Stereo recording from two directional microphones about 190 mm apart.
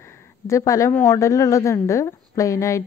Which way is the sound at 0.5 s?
15° left (ahead or behind).